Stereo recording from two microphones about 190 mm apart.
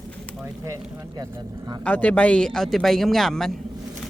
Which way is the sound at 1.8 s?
5° left (ahead or behind).